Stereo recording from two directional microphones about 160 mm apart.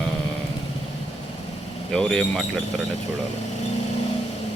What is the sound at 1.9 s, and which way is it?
Speech, 5° left (ahead or behind).